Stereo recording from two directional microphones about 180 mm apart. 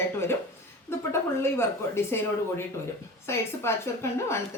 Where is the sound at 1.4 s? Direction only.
15° left (ahead or behind).